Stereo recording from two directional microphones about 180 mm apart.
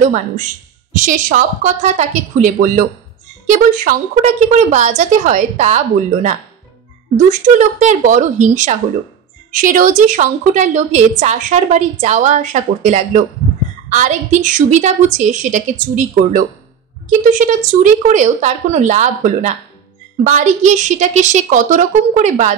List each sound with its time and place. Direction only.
0.9 s a woman's voice: 45° right (ahead or behind)
7.2 s a woman's voice: 45° right (ahead or behind)